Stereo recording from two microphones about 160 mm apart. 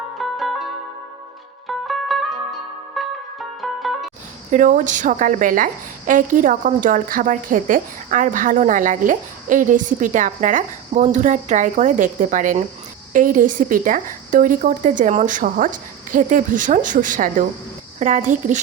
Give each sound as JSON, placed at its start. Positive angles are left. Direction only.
{"t": 0.2, "sound": "music", "side_deg": 0}
{"t": 1.6, "sound": "music", "side_deg": 0}
{"t": 4.5, "sound": "a woman's voice", "side_deg": -55}